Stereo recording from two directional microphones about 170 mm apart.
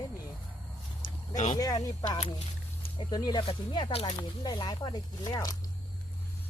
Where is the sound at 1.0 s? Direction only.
45° left (ahead or behind).